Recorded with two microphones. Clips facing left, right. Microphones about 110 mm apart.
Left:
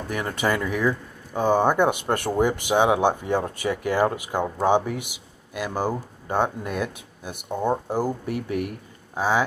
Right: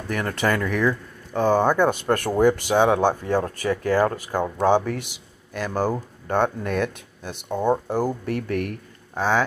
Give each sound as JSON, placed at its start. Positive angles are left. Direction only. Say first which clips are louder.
{"t": 0.1, "sound": "speech", "louder": "right 2 dB", "side_deg": 10}